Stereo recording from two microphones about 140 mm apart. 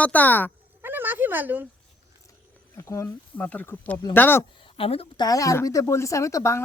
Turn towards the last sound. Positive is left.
turn(degrees=20)  # may be behind; listen again after turning